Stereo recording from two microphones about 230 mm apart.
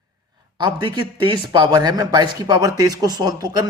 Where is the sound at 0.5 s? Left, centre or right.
Centre.